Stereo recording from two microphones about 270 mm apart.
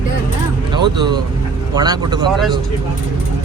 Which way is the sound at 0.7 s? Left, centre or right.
Centre.